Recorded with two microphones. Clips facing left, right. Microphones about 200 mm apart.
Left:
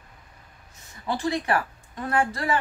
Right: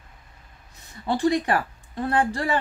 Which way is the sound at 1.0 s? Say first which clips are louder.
Right 4 dB; 35° right (ahead or behind).